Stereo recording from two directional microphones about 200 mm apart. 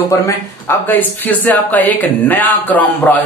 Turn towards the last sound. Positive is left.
turn(degrees=10)  # may be behind; listen again after turning